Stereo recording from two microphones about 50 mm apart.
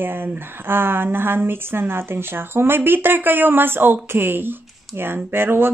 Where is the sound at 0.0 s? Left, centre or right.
Right.